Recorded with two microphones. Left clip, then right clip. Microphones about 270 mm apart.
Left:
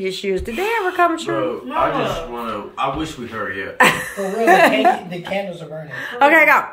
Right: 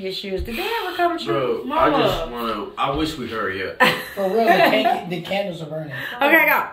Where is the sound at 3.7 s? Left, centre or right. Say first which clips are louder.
Left 4 dB; centre.